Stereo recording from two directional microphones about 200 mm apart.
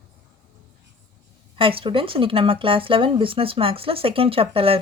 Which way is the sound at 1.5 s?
25° right (ahead or behind).